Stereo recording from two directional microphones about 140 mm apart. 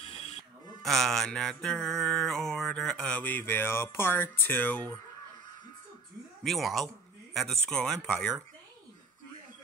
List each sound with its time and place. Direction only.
0.0 s a sound: 45° left (ahead or behind)
0.8 s mantra: centre (ahead or behind)
6.4 s mantra: centre (ahead or behind)